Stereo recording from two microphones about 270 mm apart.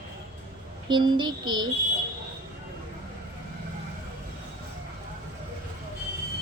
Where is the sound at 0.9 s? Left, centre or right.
Centre.